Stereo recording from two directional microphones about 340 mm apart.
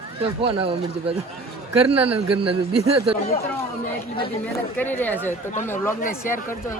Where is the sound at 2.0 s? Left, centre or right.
Right.